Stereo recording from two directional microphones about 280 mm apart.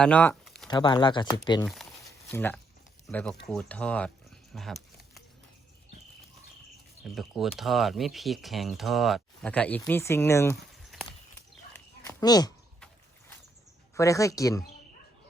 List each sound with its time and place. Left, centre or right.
0.0 s speech: centre
0.7 s speech: centre
1.7 s a sound: centre
3.1 s speech: centre
7.0 s speech: centre
11.7 s a sound: centre
12.8 s vehicle: centre
13.9 s speech: centre